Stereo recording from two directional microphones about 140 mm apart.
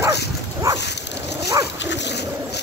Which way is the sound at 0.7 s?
20° right (ahead or behind).